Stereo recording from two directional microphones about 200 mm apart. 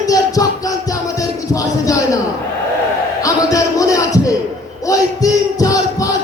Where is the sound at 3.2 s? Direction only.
15° left (ahead or behind).